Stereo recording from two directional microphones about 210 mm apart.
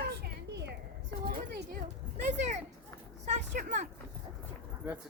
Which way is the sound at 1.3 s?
40° right (ahead or behind).